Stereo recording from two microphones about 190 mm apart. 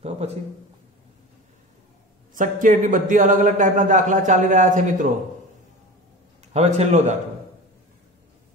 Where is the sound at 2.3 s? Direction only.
45° right (ahead or behind).